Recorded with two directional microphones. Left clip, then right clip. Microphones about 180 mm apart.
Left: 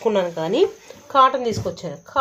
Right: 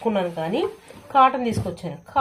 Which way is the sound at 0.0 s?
40° left (ahead or behind).